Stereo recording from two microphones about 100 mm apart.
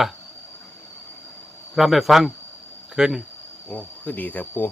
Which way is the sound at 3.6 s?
15° left (ahead or behind).